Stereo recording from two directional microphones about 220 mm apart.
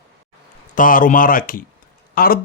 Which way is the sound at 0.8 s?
40° left (ahead or behind).